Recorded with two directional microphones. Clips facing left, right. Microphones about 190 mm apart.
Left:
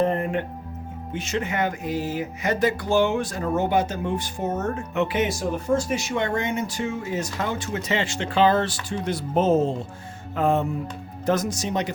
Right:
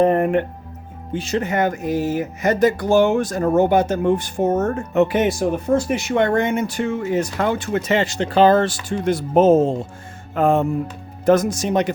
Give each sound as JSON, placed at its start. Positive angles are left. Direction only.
{"t": 0.0, "sound": "music", "side_deg": -60}
{"t": 1.1, "sound": "speech", "side_deg": -35}
{"t": 8.0, "sound": "speech", "side_deg": -40}